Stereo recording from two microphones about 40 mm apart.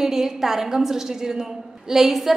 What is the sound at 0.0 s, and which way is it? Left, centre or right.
A woman's voice, centre.